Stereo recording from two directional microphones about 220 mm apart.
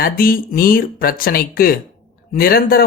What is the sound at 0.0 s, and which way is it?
Speech, 40° left (ahead or behind).